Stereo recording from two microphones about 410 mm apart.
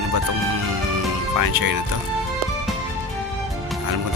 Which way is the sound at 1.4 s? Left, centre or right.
Right.